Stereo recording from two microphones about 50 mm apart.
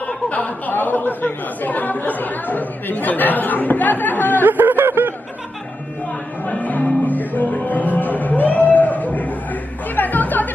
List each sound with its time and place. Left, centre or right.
0.0 s speech: left
4.5 s a sound: right
6.4 s music: left